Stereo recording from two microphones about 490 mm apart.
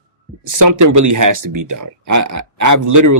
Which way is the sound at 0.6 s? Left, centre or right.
Right.